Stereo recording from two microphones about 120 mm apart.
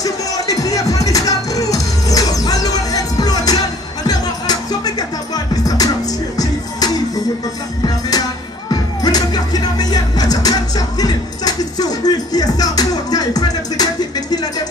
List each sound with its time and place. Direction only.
0.0 s music: 30° left (ahead or behind)
8.6 s music: 35° left (ahead or behind)